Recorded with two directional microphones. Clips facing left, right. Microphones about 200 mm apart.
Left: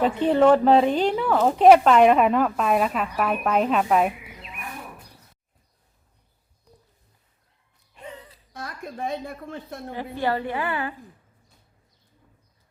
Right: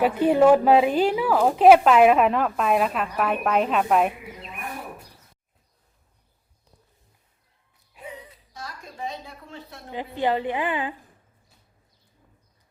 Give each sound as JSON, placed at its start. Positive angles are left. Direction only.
{"t": 0.0, "sound": "a woman's voice", "side_deg": -10}
{"t": 7.9, "sound": "music", "side_deg": -10}
{"t": 8.5, "sound": "a woman's voice", "side_deg": 55}
{"t": 9.9, "sound": "a woman's voice", "side_deg": -15}